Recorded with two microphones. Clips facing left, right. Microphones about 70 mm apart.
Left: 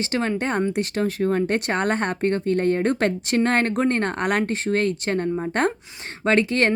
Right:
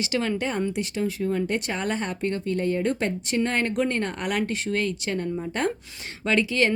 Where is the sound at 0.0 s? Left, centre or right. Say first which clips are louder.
Left 2 dB; left.